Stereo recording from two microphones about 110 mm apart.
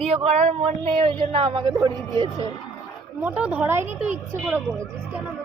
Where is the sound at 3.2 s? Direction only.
10° right (ahead or behind).